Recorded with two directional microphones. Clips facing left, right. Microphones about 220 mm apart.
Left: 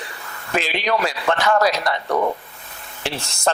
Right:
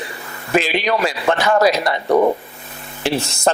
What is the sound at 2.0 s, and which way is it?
Speech, 25° right (ahead or behind).